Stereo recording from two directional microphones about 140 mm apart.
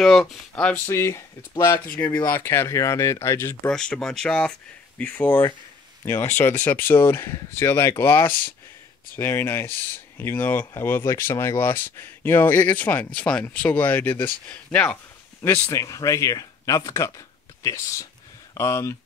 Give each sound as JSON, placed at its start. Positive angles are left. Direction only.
{"t": 0.0, "sound": "speech", "side_deg": 5}
{"t": 3.7, "sound": "speech", "side_deg": 5}
{"t": 15.4, "sound": "speech", "side_deg": 20}